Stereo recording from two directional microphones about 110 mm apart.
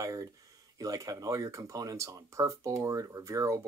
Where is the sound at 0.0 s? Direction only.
30° right (ahead or behind).